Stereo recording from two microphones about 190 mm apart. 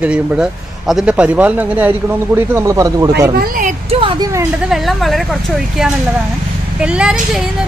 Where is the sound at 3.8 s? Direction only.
30° right (ahead or behind).